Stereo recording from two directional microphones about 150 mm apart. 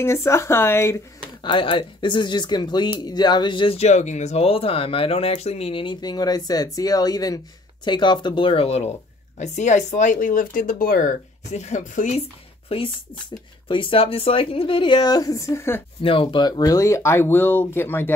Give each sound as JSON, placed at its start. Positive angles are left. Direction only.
{"t": 0.0, "sound": "speech", "side_deg": 20}
{"t": 1.4, "sound": "speech", "side_deg": 35}
{"t": 12.2, "sound": "speech", "side_deg": 40}
{"t": 16.0, "sound": "speech", "side_deg": 35}